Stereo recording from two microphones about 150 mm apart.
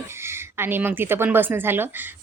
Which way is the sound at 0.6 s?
15° right (ahead or behind).